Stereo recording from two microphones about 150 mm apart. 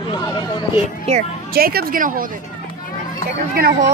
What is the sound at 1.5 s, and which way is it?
Speech, 85° right.